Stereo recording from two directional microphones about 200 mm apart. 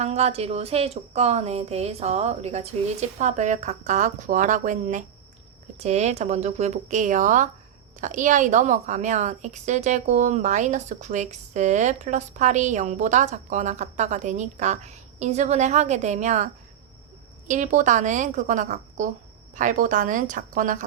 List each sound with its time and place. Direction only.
0.0 s a woman's voice: 30° right (ahead or behind)
17.5 s a woman's voice: 40° right (ahead or behind)